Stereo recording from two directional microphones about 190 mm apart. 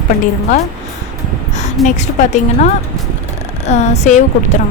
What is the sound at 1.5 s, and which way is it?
A woman's voice, 40° left (ahead or behind).